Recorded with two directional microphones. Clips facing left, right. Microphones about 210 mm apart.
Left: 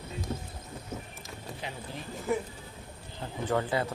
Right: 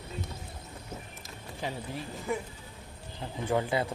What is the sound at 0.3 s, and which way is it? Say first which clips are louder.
Boat: left 8 dB; 50° left (ahead or behind).